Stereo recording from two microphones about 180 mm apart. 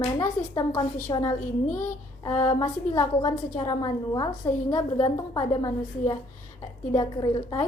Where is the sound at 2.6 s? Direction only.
20° left (ahead or behind).